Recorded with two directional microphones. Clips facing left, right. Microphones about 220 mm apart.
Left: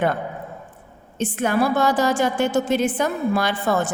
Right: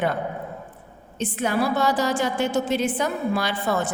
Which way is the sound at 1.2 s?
50° left (ahead or behind).